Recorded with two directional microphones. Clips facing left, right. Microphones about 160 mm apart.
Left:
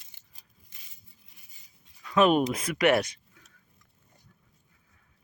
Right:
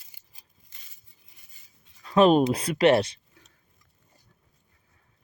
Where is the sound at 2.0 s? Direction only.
30° right (ahead or behind).